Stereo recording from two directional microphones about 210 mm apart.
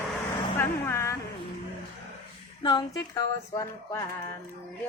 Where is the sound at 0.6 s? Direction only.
10° left (ahead or behind).